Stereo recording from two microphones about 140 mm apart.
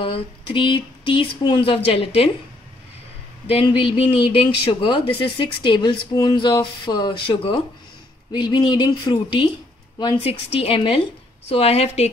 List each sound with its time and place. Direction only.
0.0 s speech: 40° left (ahead or behind)
3.4 s a woman's voice: 40° left (ahead or behind)